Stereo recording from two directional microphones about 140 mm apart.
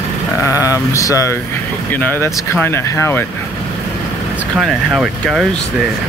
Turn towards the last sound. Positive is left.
turn(degrees=0)  # may be behind; listen again after turning